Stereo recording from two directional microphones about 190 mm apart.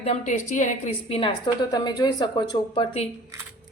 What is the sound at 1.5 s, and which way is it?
A woman's voice, 20° left (ahead or behind).